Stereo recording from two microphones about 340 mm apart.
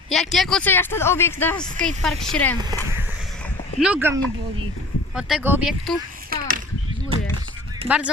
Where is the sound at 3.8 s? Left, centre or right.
Centre.